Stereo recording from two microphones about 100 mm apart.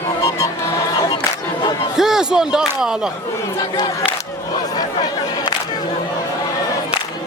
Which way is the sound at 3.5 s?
45° left (ahead or behind).